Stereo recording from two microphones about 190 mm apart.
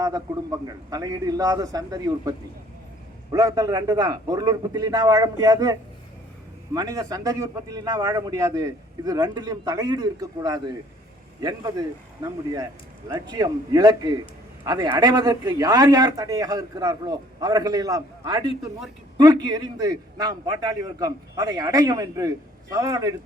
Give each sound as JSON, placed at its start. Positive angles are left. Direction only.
{"t": 0.0, "sound": "a man's voice", "side_deg": -20}
{"t": 3.3, "sound": "a man's voice", "side_deg": -20}
{"t": 6.7, "sound": "a man's voice", "side_deg": -20}